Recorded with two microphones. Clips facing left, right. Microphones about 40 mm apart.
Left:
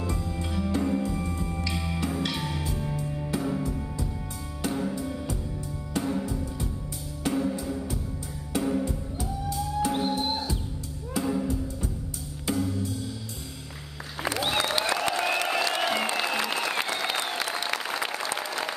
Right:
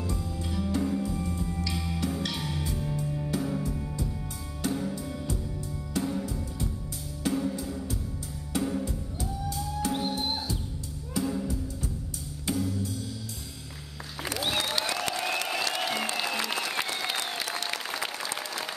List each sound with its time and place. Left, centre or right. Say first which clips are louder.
0.0 s music: left 2 dB; centre
3.7 s music: left 1 dB; centre
4.6 s music: left 2 dB; centre
11.1 s music: left 3 dB; centre
14.4 s applause: left 2 dB; centre
15.0 s a sound: left 4 dB; left
15.4 s applause: left 4 dB; left